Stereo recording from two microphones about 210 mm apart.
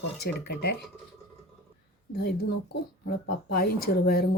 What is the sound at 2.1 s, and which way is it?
Speech, 50° left (ahead or behind).